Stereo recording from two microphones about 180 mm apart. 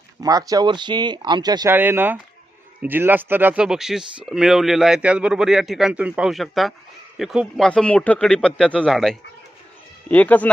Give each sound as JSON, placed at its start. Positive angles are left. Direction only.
{"t": 0.2, "sound": "speech", "side_deg": -20}
{"t": 1.7, "sound": "a man's voice", "side_deg": -10}